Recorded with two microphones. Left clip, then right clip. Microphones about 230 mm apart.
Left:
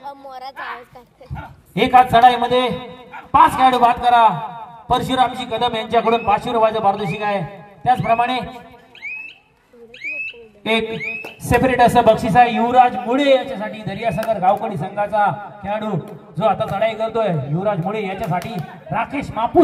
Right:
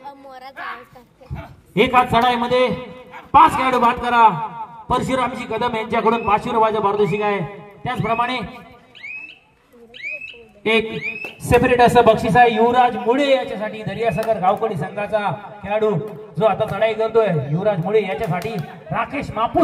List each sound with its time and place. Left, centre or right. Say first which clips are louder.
0.0 s a sound: left 4 dB; left
1.8 s a man's voice: left 4 dB; left
10.0 s speech: left 4 dB; left; by 19.6 s centre